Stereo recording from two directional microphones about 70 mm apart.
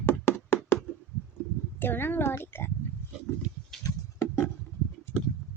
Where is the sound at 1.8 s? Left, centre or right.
Left.